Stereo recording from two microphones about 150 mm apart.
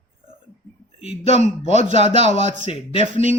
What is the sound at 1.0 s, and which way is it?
A man's voice, 45° left (ahead or behind).